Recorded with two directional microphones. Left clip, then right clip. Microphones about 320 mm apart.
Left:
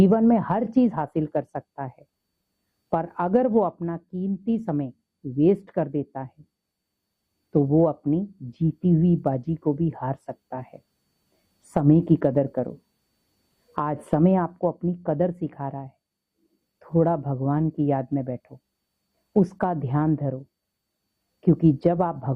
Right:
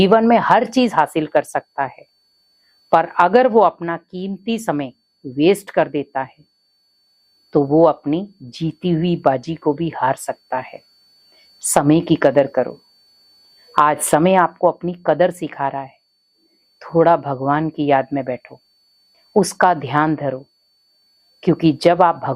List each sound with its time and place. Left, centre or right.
0.0 s a woman's voice: centre
7.5 s a woman's voice: centre
17.0 s a woman's voice: centre
21.4 s a woman's voice: centre